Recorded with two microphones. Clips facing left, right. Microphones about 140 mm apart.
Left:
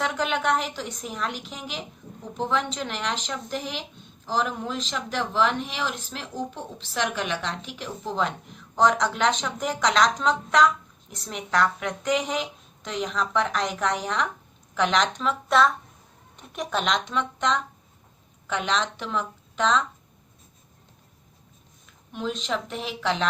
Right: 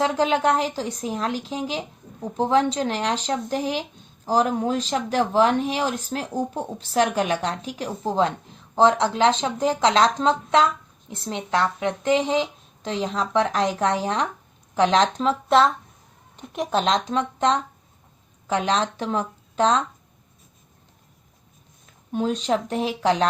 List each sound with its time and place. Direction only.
0.0 s speech: 30° right (ahead or behind)
22.1 s speech: 40° right (ahead or behind)